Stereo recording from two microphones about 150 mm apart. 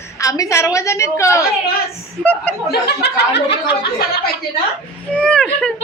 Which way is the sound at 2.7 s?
90° left.